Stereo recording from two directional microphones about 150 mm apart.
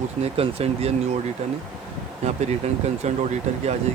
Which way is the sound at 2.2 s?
45° right (ahead or behind).